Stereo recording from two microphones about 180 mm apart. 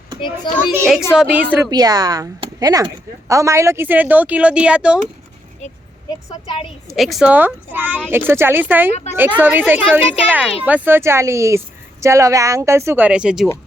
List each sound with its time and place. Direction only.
0.2 s a woman's voice: 25° left (ahead or behind)
0.6 s a woman's voice: centre (ahead or behind)
1.7 s speech: 20° right (ahead or behind); by 4.9 s 5° right (ahead or behind)
6.1 s a woman's voice: 20° left (ahead or behind)
6.8 s speech: centre (ahead or behind)